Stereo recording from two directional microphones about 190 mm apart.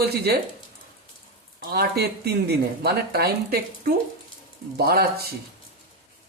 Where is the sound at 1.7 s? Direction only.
55° right (ahead or behind).